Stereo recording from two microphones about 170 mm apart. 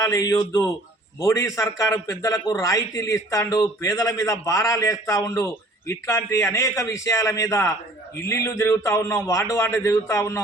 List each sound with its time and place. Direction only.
0.0 s a man's voice: 20° left (ahead or behind)